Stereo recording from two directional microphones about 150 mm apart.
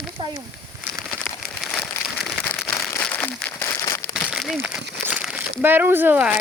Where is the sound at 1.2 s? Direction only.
5° left (ahead or behind).